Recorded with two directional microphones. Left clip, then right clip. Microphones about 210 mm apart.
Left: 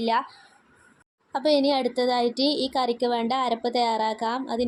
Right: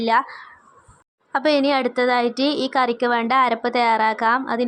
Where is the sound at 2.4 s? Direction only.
35° right (ahead or behind).